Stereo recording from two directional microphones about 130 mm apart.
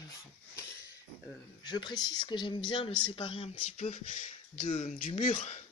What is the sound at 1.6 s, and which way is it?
Speech, 35° left (ahead or behind).